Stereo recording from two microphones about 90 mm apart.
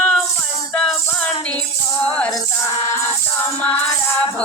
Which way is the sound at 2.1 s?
10° left (ahead or behind).